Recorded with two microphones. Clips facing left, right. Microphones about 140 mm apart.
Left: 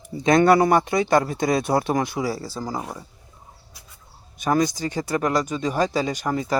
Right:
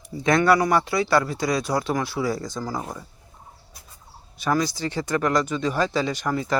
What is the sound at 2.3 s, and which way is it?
Speech, 10° left (ahead or behind).